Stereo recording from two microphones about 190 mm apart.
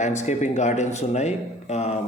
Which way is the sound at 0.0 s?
40° left (ahead or behind).